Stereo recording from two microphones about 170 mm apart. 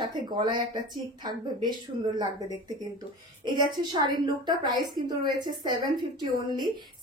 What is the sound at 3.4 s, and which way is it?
Speech, 25° right (ahead or behind).